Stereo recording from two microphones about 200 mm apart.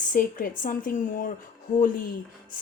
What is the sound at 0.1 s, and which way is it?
Speech, 45° left (ahead or behind).